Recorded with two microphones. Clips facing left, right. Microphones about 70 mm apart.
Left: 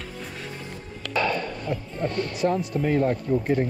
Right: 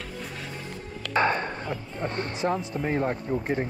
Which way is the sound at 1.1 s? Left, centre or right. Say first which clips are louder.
Right 1 dB; right.